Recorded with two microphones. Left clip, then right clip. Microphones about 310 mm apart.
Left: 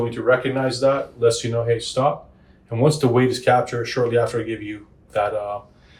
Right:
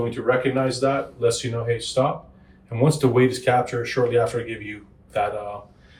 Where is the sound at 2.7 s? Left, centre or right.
Left.